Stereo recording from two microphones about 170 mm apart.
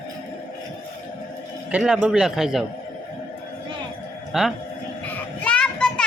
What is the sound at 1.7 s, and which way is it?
Speech, 5° right (ahead or behind).